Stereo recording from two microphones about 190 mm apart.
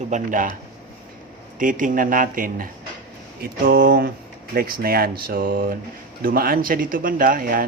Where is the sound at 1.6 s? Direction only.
45° right (ahead or behind).